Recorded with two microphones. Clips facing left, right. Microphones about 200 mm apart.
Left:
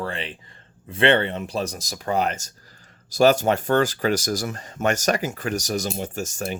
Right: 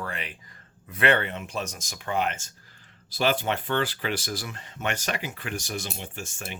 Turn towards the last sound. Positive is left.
turn(degrees=40)  # may be behind; listen again after turning